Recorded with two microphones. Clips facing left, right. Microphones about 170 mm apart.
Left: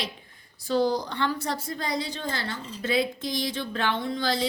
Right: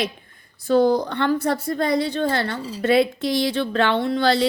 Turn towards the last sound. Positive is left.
turn(degrees=-70)  # may be behind; listen again after turning